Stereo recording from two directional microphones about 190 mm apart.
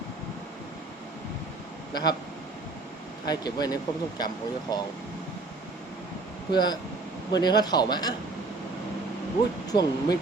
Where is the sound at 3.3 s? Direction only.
20° left (ahead or behind).